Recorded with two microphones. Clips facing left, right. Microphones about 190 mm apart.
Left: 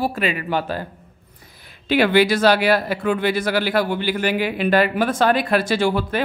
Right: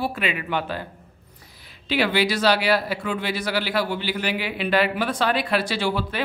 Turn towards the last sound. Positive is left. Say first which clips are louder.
# left 5 dB
turn(degrees=50)  # may be behind; listen again after turning